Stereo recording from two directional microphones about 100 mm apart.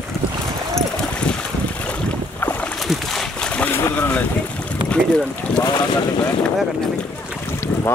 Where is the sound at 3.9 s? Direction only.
15° left (ahead or behind).